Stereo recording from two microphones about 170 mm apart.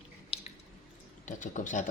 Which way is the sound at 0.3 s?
35° left (ahead or behind).